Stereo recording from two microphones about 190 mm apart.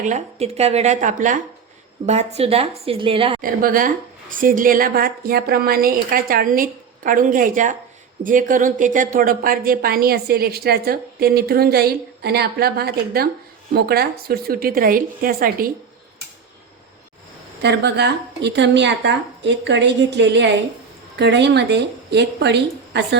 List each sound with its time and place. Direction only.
0.0 s speech: 35° right (ahead or behind)
3.4 s a woman's voice: 45° right (ahead or behind)
17.6 s a woman's voice: 60° right (ahead or behind)